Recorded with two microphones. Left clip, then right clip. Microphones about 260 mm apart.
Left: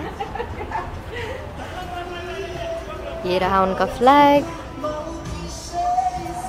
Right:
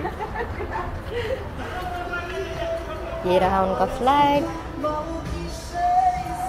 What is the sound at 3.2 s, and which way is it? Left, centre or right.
Speech, centre.